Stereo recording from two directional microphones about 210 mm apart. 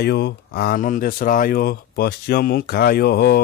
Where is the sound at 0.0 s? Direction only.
50° left (ahead or behind).